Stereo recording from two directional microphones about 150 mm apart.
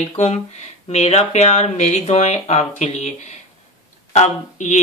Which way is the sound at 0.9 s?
50° left (ahead or behind).